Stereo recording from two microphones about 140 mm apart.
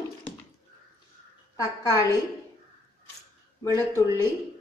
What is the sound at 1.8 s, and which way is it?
Speech, 20° left (ahead or behind).